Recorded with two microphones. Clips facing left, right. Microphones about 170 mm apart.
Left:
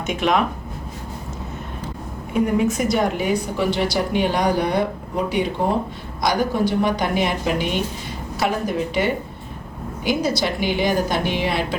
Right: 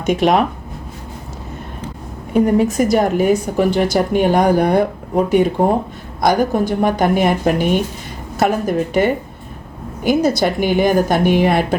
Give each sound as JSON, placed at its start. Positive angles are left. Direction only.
{"t": 0.2, "sound": "speech", "side_deg": -35}
{"t": 2.3, "sound": "a woman's voice", "side_deg": -40}